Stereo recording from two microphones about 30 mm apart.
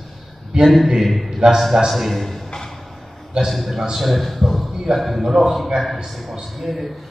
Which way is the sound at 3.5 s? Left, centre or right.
Centre.